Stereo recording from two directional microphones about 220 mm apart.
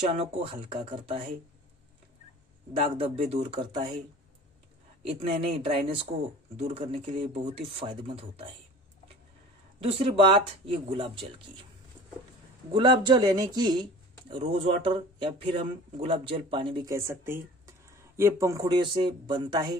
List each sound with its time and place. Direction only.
0.2 s speech: 25° right (ahead or behind)
2.8 s speech: 30° right (ahead or behind)
5.4 s speech: 25° right (ahead or behind)
9.8 s speech: 25° right (ahead or behind)
12.7 s speech: 20° right (ahead or behind)